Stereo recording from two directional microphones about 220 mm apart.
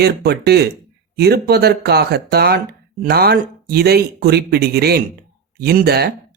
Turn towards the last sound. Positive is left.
turn(degrees=-45)  # may be behind; listen again after turning